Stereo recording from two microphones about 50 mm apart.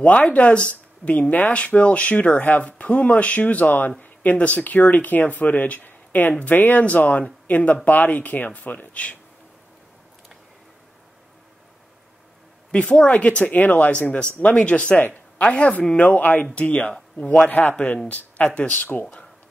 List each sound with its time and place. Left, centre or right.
0.0 s speech: left
12.7 s speech: left
17.5 s speech: left
17.7 s speech: left